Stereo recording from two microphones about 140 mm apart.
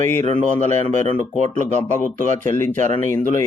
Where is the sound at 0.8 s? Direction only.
60° right (ahead or behind).